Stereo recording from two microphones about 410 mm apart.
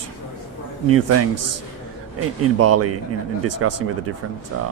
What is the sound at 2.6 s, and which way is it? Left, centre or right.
Speech, right.